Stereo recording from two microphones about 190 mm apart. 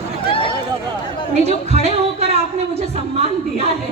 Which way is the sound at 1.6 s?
35° right (ahead or behind).